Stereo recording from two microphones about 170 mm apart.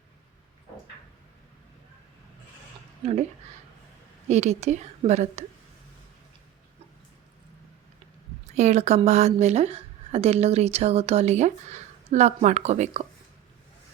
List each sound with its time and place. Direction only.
3.0 s speech: 35° right (ahead or behind)
4.3 s a woman's voice: 40° right (ahead or behind)
8.4 s a woman's voice: 40° right (ahead or behind)